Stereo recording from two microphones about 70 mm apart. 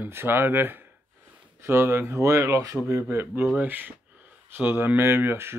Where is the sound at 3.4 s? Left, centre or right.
Right.